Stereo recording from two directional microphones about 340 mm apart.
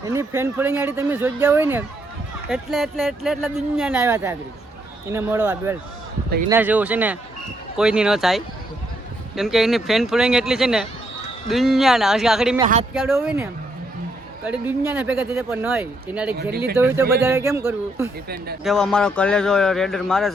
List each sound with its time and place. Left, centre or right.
0.0 s speech: centre